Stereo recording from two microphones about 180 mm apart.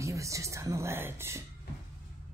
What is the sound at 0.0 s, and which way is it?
Speech, 15° right (ahead or behind).